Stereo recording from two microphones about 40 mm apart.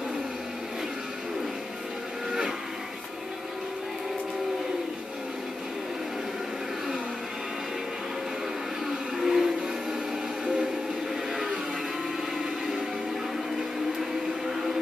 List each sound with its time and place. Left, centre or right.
9.2 s music: centre